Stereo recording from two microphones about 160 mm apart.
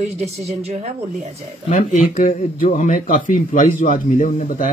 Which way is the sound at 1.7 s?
60° left (ahead or behind).